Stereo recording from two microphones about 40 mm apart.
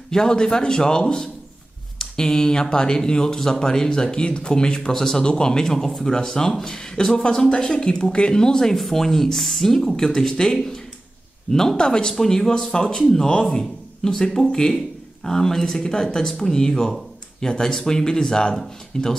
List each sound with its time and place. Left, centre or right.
0.1 s a woman's voice: centre
8.7 s speech: centre